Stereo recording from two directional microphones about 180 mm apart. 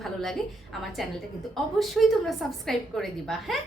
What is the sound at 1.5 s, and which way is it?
A woman's voice, centre (ahead or behind).